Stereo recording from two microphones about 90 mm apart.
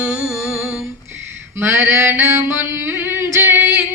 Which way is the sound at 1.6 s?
30° right (ahead or behind).